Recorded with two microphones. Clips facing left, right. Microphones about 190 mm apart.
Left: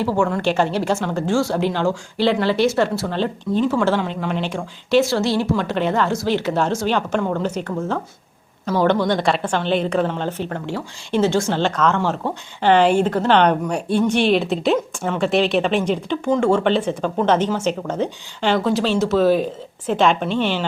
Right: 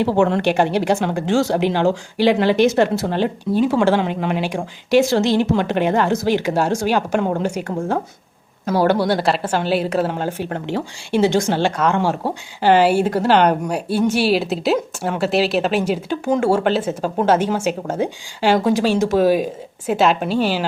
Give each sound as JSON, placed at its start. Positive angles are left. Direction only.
{"t": 0.1, "sound": "a woman's voice", "side_deg": -25}
{"t": 7.2, "sound": "a woman's voice", "side_deg": -20}
{"t": 8.6, "sound": "speech", "side_deg": -40}
{"t": 8.9, "sound": "a woman's voice", "side_deg": -10}